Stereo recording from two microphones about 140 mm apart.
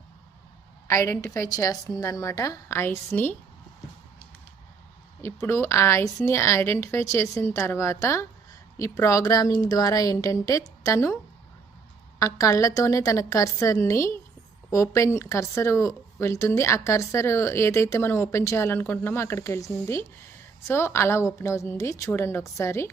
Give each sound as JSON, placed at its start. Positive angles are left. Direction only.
{"t": 0.9, "sound": "a woman's voice", "side_deg": 20}
{"t": 5.2, "sound": "a woman's voice", "side_deg": 20}
{"t": 12.2, "sound": "a woman's voice", "side_deg": 25}